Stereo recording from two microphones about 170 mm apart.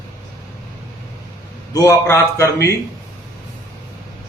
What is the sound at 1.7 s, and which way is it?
Speech, 15° left (ahead or behind).